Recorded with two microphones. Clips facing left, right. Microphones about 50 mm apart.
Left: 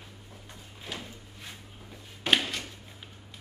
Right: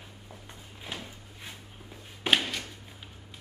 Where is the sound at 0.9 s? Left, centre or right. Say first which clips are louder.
Even; right.